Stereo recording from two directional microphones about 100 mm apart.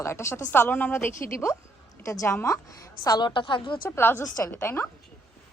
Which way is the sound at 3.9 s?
25° left (ahead or behind).